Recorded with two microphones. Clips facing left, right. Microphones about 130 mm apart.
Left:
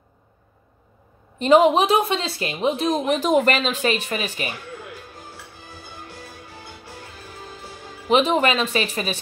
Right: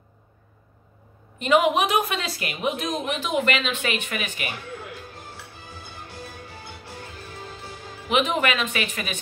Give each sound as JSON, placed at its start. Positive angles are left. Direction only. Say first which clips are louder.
{"t": 1.4, "sound": "speech", "louder": "left 5 dB", "side_deg": 30}
{"t": 8.1, "sound": "speech", "louder": "left 5 dB", "side_deg": 35}